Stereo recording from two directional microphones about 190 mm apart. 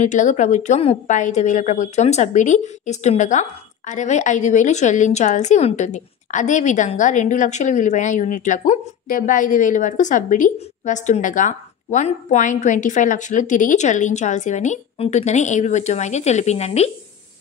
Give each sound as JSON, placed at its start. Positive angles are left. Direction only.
{"t": 0.0, "sound": "a woman's voice", "side_deg": 40}